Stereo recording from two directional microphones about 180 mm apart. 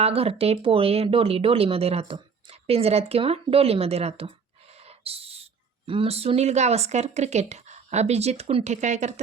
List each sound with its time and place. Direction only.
0.0 s speech: 35° right (ahead or behind)